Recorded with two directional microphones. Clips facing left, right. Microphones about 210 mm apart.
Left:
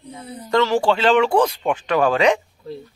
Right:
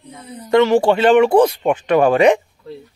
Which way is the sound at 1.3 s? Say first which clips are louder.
Right 5 dB; 20° right (ahead or behind).